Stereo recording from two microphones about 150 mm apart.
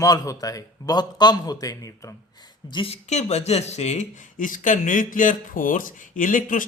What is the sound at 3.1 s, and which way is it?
Speech, 45° left (ahead or behind).